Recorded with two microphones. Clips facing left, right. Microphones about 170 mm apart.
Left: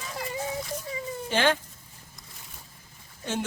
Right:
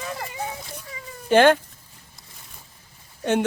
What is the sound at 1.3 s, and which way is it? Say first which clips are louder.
Speech: right 10 dB; 55° right (ahead or behind).